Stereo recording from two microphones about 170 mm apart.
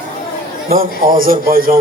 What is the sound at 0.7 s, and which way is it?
A man's voice, 55° right (ahead or behind).